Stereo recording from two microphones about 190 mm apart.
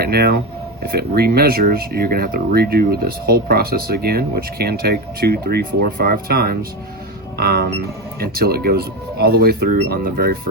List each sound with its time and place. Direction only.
0.0 s speech: 55° right (ahead or behind)